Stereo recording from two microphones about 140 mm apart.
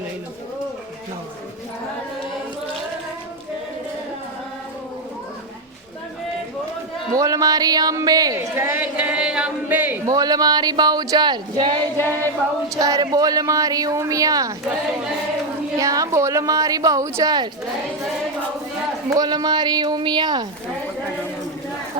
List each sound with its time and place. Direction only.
7.1 s speech: 25° right (ahead or behind)
10.1 s speech: 25° right (ahead or behind)
11.9 s chant: 15° left (ahead or behind)
12.7 s speech: 25° right (ahead or behind)
15.8 s speech: 25° right (ahead or behind)
19.1 s speech: 30° right (ahead or behind)